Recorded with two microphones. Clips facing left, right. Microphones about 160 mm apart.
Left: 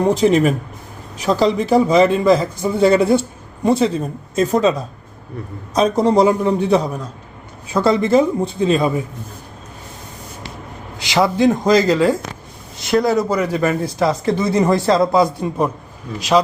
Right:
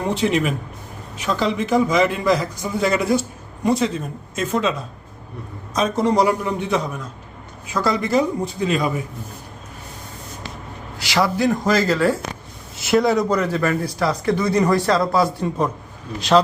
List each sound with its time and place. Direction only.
0.1 s a man's voice: 40° left (ahead or behind)
10.9 s speech: 20° left (ahead or behind)
12.8 s speech: centre (ahead or behind)